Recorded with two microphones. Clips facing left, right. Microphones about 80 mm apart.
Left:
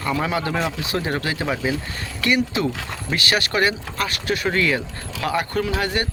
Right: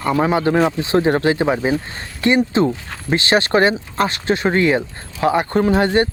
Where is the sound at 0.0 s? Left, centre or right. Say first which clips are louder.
Right 6 dB; right.